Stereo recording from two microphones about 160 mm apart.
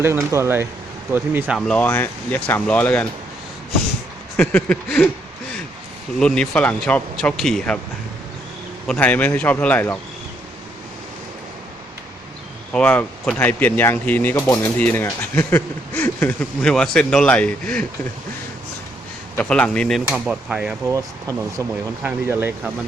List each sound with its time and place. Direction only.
0.0 s speech: 15° right (ahead or behind)
1.5 s speech: 5° left (ahead or behind)
4.4 s speech: 10° left (ahead or behind)
6.1 s speech: 5° left (ahead or behind)
8.9 s speech: 10° left (ahead or behind)
12.7 s speech: 10° left (ahead or behind)
19.4 s speech: 10° left (ahead or behind)
20.1 s speech: 5° right (ahead or behind)
20.8 s speech: 20° right (ahead or behind)